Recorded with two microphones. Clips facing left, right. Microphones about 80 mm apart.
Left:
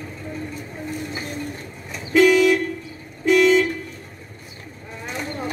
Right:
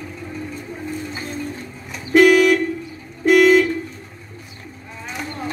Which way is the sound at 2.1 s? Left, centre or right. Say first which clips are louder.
Right 3 dB; right.